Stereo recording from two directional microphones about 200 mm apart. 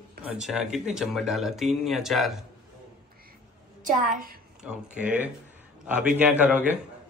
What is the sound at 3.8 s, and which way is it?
Speech, 40° right (ahead or behind).